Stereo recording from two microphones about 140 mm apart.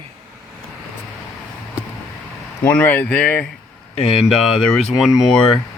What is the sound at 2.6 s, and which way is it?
Speech, 15° left (ahead or behind).